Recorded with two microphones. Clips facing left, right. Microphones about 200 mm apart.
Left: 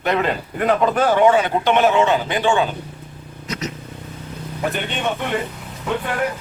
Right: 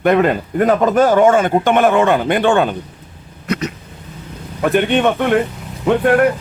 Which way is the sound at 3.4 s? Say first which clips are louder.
Right 7 dB; 60° right (ahead or behind).